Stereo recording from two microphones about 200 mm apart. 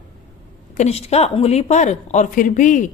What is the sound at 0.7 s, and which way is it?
A woman's voice, 30° left (ahead or behind).